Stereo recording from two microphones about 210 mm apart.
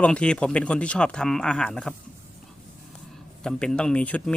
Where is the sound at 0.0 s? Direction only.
5° left (ahead or behind).